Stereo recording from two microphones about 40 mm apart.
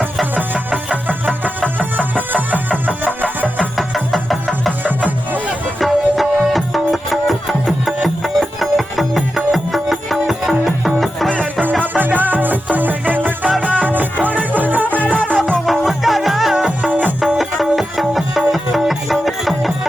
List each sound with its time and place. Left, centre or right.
0.3 s music: right
3.8 s music: centre
4.8 s music: right
5.8 s music: centre
11.8 s music: right
15.6 s music: centre
16.9 s music: right
17.3 s music: centre